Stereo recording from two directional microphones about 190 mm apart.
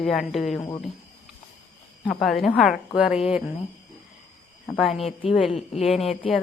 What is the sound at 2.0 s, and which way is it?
Speech, centre (ahead or behind).